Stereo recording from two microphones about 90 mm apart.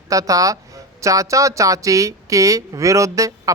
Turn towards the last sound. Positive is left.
turn(degrees=-35)  # may be behind; listen again after turning